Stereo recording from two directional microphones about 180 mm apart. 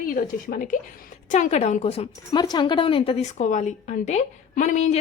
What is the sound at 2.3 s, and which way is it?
A woman's voice, 25° left (ahead or behind).